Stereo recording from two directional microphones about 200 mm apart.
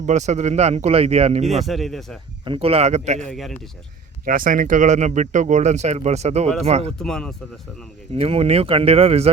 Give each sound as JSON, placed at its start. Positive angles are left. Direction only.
{"t": 0.0, "sound": "speech", "side_deg": -35}
{"t": 1.5, "sound": "speech", "side_deg": 0}
{"t": 2.4, "sound": "speech", "side_deg": -25}
{"t": 3.2, "sound": "speech", "side_deg": 0}
{"t": 4.3, "sound": "speech", "side_deg": -45}
{"t": 7.0, "sound": "speech", "side_deg": 5}
{"t": 8.1, "sound": "speech", "side_deg": -30}